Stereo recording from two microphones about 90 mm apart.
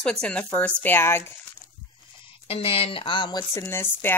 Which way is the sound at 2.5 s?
90° left.